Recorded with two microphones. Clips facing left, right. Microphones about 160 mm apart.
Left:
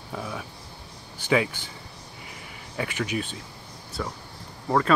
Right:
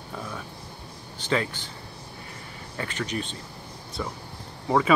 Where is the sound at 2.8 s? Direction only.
10° left (ahead or behind).